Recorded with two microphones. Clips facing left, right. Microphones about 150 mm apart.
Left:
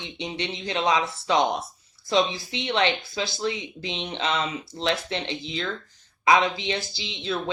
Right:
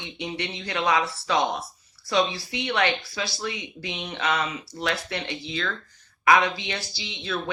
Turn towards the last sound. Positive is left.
turn(degrees=20)  # may be behind; listen again after turning